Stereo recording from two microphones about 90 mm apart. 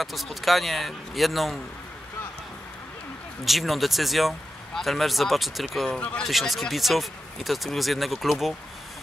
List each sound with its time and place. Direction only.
0.0 s speech: centre (ahead or behind)
3.4 s speech: centre (ahead or behind)
6.2 s speech: centre (ahead or behind)